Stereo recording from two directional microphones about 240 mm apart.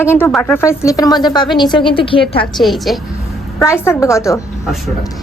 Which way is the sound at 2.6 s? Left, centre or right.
Centre.